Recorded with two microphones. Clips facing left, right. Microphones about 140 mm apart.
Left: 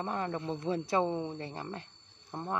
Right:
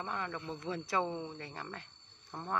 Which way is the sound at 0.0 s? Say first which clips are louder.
Left 5 dB; 35° left (ahead or behind).